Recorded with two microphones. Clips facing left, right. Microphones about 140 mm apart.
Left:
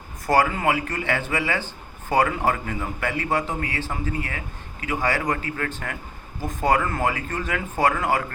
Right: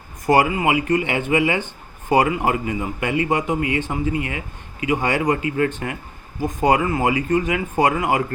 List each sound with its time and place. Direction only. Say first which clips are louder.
0.3 s speech: right 3 dB; 15° right (ahead or behind)